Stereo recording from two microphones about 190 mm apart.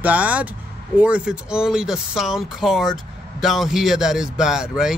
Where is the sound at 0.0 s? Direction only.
10° right (ahead or behind).